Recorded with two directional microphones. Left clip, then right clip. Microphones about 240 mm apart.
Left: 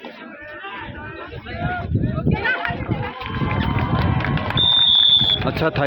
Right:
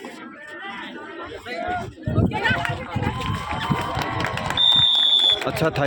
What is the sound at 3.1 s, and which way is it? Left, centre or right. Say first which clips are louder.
Run: left 2 dB; centre.